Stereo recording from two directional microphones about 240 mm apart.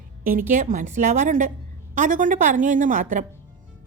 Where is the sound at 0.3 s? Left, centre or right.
Right.